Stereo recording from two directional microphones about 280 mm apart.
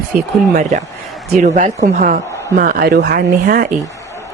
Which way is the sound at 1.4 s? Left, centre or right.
Right.